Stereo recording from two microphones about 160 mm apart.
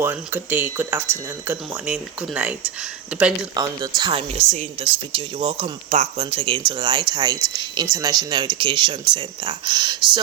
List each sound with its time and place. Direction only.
0.0 s speech: 10° right (ahead or behind)
3.5 s speech: 25° right (ahead or behind)